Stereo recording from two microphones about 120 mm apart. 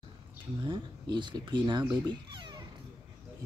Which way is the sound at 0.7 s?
40° right (ahead or behind).